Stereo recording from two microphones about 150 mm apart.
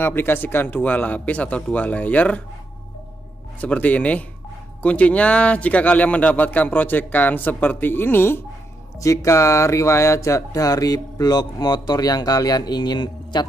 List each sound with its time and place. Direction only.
0.0 s a man's voice: 15° left (ahead or behind)
3.6 s a man's voice: 10° left (ahead or behind); by 13.5 s 30° left (ahead or behind)